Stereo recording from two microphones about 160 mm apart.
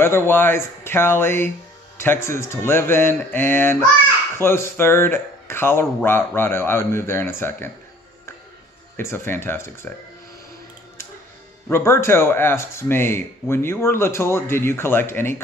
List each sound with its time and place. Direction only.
0.0 s speech: 15° left (ahead or behind)
8.9 s speech: 15° left (ahead or behind)
11.7 s speech: 15° left (ahead or behind)